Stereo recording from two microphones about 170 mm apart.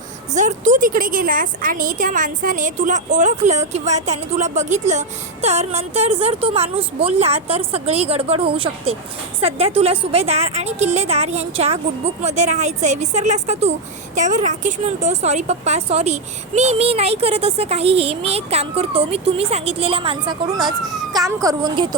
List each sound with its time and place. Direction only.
0.3 s a woman's voice: 45° right (ahead or behind); by 21.8 s 25° right (ahead or behind)